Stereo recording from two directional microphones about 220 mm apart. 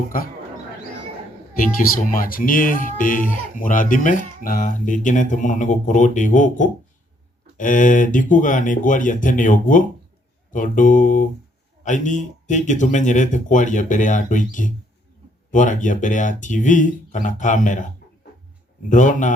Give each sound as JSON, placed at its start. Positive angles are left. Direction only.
{"t": 1.5, "sound": "speech", "side_deg": 40}